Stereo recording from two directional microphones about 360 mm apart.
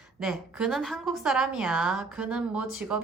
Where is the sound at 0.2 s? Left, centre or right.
Centre.